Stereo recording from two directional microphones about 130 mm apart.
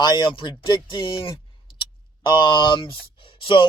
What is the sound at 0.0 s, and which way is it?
Speech, 35° left (ahead or behind).